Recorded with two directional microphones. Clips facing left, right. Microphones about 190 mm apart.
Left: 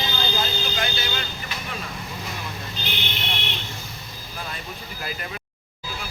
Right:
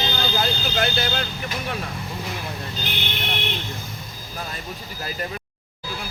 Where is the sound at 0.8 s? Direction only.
60° right (ahead or behind).